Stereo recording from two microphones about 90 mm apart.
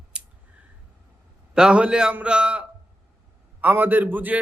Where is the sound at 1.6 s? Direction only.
10° right (ahead or behind).